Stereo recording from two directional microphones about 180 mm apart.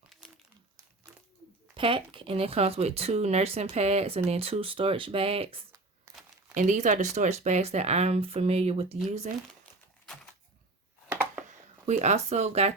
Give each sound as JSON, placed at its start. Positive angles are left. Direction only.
{"t": 1.7, "sound": "speech", "side_deg": -30}
{"t": 6.5, "sound": "speech", "side_deg": -45}
{"t": 11.1, "sound": "a sound", "side_deg": -10}
{"t": 11.9, "sound": "speech", "side_deg": -40}